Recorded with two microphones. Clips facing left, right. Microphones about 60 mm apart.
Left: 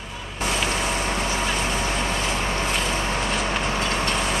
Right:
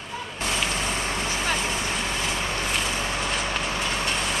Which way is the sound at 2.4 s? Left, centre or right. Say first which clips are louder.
Left 3 dB; left.